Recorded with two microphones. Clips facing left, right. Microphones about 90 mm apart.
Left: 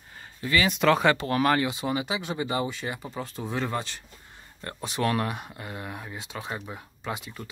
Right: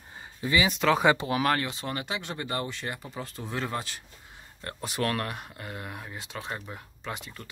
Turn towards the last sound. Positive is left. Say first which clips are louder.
# left 3 dB
turn(degrees=5)  # may be behind; listen again after turning